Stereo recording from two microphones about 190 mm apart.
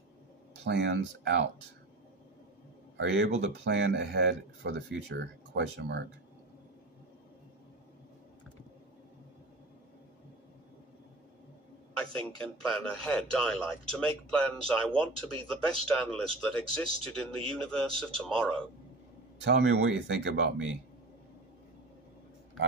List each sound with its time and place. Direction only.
0.7 s speech: 65° right (ahead or behind)
3.0 s a man's voice: 80° right
12.0 s a man's voice: 5° left (ahead or behind)
19.4 s speech: 70° right (ahead or behind)